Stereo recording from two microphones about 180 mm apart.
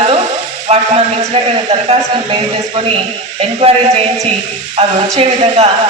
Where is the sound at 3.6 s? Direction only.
30° right (ahead or behind).